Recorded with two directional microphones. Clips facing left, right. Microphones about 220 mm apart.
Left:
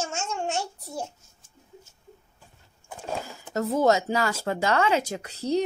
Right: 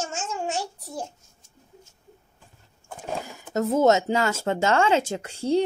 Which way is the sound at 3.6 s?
20° right (ahead or behind).